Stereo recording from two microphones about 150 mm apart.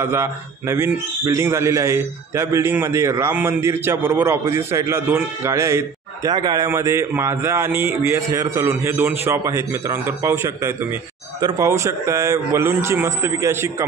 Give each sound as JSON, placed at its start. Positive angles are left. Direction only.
{"t": 0.0, "sound": "a man's voice", "side_deg": -15}